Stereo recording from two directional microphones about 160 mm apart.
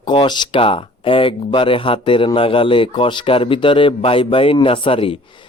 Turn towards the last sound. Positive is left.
turn(degrees=35)  # may be behind; listen again after turning